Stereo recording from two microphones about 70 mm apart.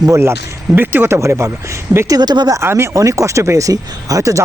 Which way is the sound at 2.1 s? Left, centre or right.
Right.